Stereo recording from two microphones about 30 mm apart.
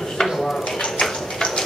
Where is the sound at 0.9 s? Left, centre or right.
Centre.